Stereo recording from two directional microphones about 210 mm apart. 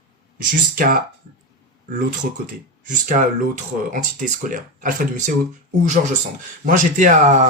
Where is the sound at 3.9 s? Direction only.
40° right (ahead or behind).